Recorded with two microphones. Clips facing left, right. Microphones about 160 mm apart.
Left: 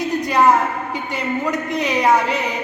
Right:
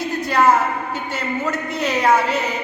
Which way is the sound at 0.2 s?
15° left (ahead or behind).